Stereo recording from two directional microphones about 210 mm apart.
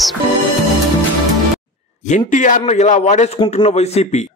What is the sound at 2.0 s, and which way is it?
A man's voice, 35° left (ahead or behind).